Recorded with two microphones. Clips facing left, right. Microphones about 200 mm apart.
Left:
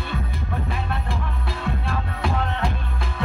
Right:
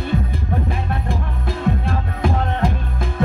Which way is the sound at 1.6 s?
45° right (ahead or behind).